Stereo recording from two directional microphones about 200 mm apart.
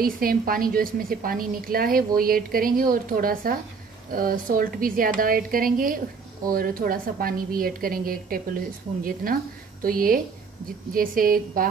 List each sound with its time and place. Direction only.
0.0 s a woman's voice: 45° right (ahead or behind)